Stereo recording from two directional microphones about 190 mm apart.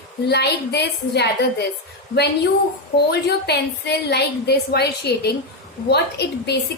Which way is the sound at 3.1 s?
60° left (ahead or behind).